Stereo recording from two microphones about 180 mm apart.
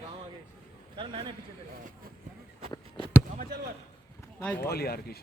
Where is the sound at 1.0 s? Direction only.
25° right (ahead or behind).